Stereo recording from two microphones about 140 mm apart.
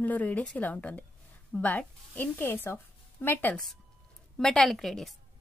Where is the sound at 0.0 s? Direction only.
10° left (ahead or behind).